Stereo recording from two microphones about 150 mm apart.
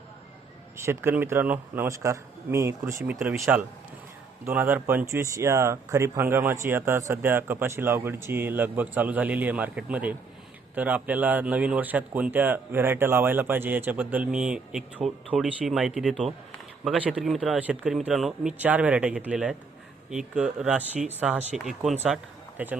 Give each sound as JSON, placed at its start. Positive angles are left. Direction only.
{"t": 0.8, "sound": "speech", "side_deg": -15}